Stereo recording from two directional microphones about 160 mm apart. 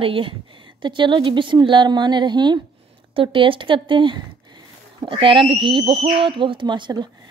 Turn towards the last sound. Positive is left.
turn(degrees=-30)  # may be behind; listen again after turning